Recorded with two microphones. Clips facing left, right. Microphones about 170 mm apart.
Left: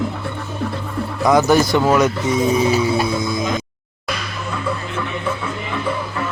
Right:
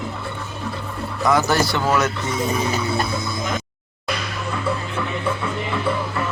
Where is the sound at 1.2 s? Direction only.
15° left (ahead or behind).